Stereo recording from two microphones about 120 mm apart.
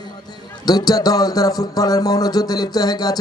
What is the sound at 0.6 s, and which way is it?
Speech, 35° left (ahead or behind).